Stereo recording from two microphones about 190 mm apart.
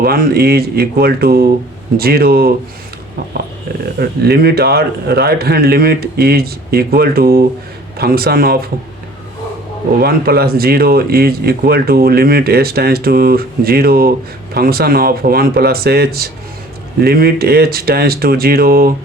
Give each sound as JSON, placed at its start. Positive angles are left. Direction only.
{"t": 0.0, "sound": "a man's voice", "side_deg": -55}
{"t": 4.0, "sound": "a man's voice", "side_deg": -55}
{"t": 10.0, "sound": "speech", "side_deg": -55}